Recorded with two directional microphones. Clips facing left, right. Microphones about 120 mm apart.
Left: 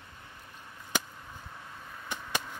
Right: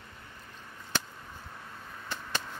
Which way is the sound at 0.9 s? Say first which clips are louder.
Left 1 dB; 15° left (ahead or behind).